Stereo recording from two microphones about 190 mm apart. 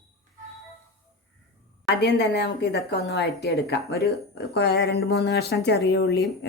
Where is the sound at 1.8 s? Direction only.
65° left (ahead or behind).